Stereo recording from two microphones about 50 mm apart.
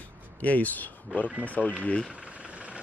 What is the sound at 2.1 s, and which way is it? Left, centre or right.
Vehicle, right.